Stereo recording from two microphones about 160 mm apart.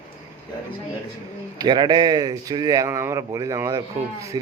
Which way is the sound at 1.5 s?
25° right (ahead or behind).